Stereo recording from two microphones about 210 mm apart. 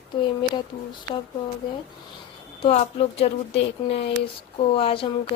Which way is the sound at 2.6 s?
30° left (ahead or behind).